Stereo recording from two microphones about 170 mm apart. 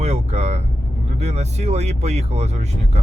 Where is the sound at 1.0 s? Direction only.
40° right (ahead or behind).